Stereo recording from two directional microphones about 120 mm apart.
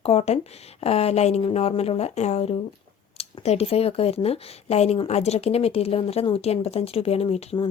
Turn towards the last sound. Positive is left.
turn(degrees=50)  # may be behind; listen again after turning